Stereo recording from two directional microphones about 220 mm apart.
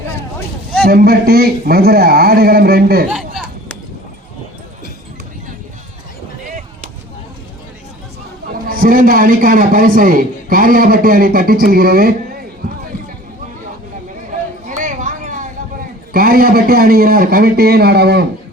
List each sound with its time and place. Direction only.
0.9 s a man's voice: 45° right (ahead or behind)
8.6 s a man's voice: 40° right (ahead or behind)
14.7 s a sound: 35° right (ahead or behind)
16.1 s a man's voice: 40° right (ahead or behind)